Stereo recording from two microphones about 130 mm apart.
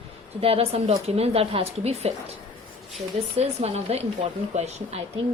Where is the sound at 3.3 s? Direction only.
50° right (ahead or behind).